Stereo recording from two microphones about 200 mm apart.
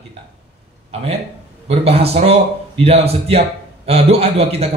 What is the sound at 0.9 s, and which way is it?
A man's voice, 30° right (ahead or behind).